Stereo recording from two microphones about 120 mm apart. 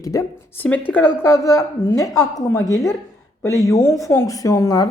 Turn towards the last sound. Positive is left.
turn(degrees=30)  # may be behind; listen again after turning